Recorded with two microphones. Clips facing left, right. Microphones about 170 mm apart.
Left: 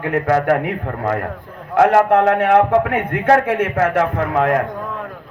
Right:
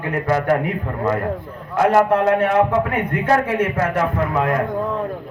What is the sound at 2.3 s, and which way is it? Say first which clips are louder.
A man's voice: left 3 dB; 60° left (ahead or behind).